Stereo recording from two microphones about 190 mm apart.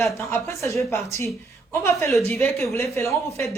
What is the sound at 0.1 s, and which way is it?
Speech, 10° left (ahead or behind).